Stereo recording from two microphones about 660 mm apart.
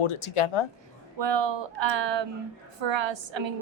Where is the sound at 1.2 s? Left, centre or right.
Right.